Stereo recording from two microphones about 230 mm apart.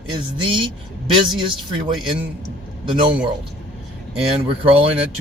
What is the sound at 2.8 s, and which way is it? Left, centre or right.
Speech, right.